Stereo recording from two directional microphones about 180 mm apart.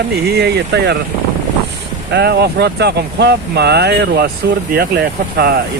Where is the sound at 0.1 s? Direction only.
65° right (ahead or behind).